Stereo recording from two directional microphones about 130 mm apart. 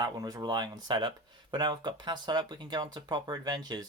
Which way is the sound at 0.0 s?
30° right (ahead or behind).